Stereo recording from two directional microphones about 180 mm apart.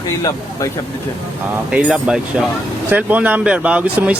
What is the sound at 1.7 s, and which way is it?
Speech, 5° right (ahead or behind).